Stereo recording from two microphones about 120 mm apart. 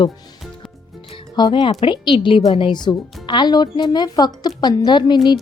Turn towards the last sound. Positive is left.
turn(degrees=40)  # may be behind; listen again after turning